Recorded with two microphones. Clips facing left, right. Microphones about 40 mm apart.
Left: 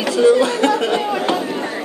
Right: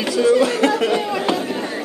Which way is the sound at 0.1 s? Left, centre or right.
Left.